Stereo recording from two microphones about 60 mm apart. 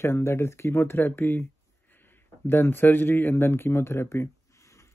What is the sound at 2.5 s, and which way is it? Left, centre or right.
Speech, left.